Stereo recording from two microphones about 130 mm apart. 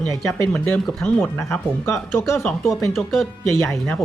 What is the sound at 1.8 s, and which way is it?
Speech, 20° left (ahead or behind).